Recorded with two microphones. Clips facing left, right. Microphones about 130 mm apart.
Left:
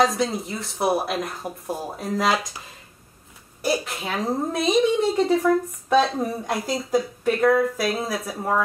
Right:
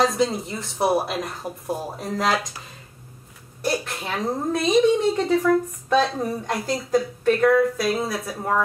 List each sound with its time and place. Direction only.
0.0 s a woman's voice: centre (ahead or behind)
3.6 s a woman's voice: 5° left (ahead or behind)